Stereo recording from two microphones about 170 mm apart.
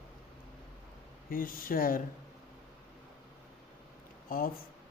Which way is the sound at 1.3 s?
55° left (ahead or behind).